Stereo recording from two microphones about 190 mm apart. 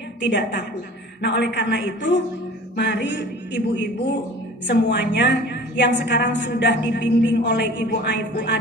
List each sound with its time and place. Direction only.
0.2 s a woman's voice: 65° left (ahead or behind)